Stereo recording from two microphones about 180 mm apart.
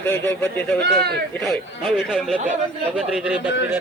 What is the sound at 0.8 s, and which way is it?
Speech, 60° right (ahead or behind).